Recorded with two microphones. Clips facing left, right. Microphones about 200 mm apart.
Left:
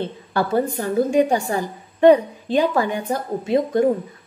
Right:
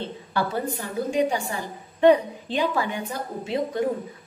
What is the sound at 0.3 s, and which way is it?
A woman's voice, 50° left (ahead or behind).